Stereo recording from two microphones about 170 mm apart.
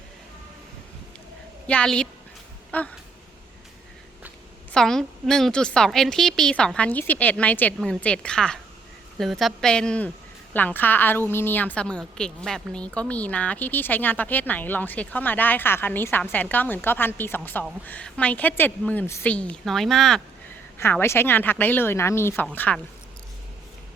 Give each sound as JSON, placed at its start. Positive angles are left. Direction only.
{"t": 1.6, "sound": "a woman's voice", "side_deg": 5}
{"t": 4.7, "sound": "a woman's voice", "side_deg": 5}
{"t": 20.7, "sound": "a woman's voice", "side_deg": 15}